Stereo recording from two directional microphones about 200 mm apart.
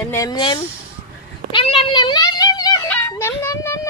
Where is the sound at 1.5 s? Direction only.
25° left (ahead or behind).